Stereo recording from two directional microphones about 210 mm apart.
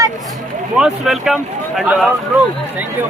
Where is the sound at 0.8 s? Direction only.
Centre (ahead or behind).